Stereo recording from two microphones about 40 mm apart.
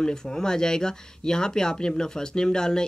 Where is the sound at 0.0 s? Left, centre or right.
Centre.